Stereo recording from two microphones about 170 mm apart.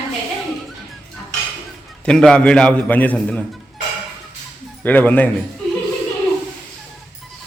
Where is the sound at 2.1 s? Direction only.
5° left (ahead or behind).